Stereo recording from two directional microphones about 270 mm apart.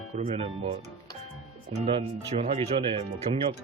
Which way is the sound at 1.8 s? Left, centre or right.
Right.